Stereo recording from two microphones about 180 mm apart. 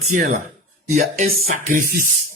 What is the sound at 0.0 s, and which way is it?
Speech, 45° right (ahead or behind).